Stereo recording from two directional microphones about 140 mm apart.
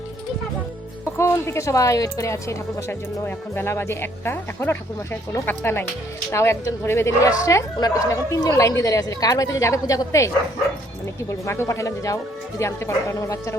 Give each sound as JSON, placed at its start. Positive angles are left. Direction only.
{"t": 1.1, "sound": "a woman's voice", "side_deg": 20}